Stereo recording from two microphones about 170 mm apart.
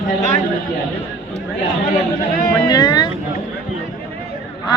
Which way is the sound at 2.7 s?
25° left (ahead or behind).